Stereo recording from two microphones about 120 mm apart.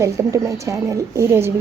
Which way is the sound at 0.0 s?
25° right (ahead or behind).